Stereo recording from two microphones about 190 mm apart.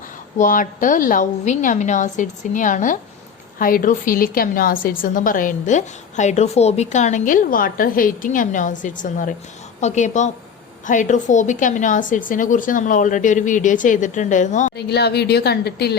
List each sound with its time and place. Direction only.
0.3 s a woman's voice: 45° left (ahead or behind)
14.8 s a woman's voice: 60° left (ahead or behind)